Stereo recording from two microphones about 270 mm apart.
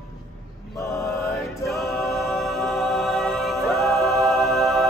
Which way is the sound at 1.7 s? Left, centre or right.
Centre.